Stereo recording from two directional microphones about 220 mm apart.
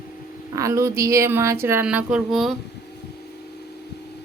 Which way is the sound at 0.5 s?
15° right (ahead or behind).